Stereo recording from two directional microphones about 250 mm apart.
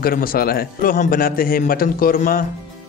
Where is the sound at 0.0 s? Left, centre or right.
Left.